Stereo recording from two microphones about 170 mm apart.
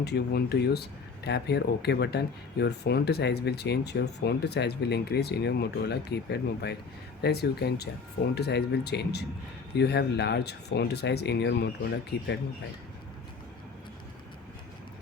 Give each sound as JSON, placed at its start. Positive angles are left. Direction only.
{"t": 0.0, "sound": "speech", "side_deg": 70}